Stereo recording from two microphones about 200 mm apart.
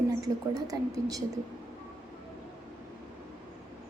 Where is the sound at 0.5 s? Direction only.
20° right (ahead or behind).